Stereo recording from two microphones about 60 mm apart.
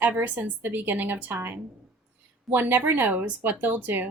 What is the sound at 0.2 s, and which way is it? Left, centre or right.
A woman's voice, right.